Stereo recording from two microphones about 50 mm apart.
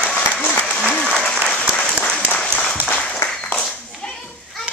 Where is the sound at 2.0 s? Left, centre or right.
Left.